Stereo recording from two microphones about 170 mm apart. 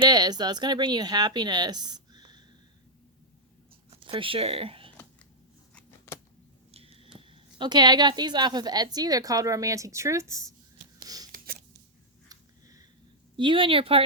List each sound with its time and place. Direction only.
0.0 s speech: 25° right (ahead or behind)
3.8 s speech: 30° right (ahead or behind)
6.1 s a sound: 15° left (ahead or behind)
6.7 s speech: 35° right (ahead or behind); by 10.4 s 20° right (ahead or behind)
12.3 s a sound: 20° right (ahead or behind)
13.3 s speech: 30° right (ahead or behind)